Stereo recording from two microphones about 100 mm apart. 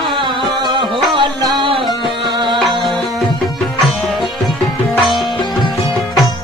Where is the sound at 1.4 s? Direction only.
40° right (ahead or behind).